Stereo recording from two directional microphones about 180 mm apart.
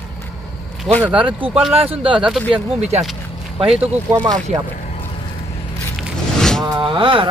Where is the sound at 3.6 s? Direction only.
5° right (ahead or behind).